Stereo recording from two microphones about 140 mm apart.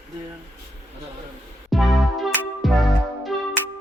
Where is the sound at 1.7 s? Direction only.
Centre (ahead or behind).